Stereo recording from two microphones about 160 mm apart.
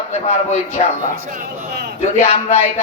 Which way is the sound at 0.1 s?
45° left (ahead or behind).